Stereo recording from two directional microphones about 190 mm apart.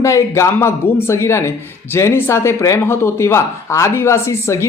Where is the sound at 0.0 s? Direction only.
15° left (ahead or behind).